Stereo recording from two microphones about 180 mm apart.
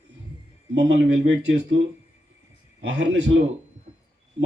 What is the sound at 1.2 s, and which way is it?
Speech, 75° right (ahead or behind).